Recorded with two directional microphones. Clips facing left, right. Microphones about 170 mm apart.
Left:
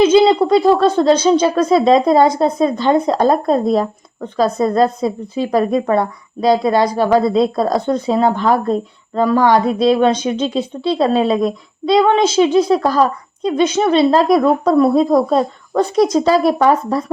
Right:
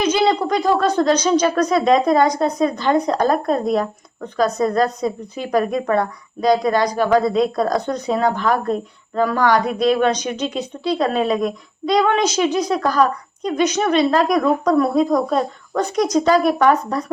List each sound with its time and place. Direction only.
0.0 s speech: 25° left (ahead or behind)